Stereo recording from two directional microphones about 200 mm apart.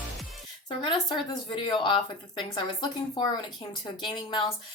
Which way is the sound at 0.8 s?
25° left (ahead or behind).